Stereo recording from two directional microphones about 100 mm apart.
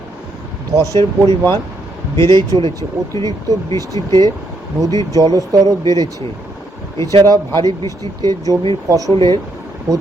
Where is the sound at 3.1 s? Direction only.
35° left (ahead or behind).